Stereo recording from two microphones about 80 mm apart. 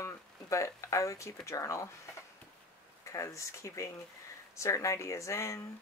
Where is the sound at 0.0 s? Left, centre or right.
Left.